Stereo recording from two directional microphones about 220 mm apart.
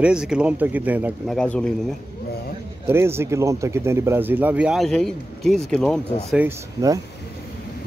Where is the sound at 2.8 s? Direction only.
10° right (ahead or behind).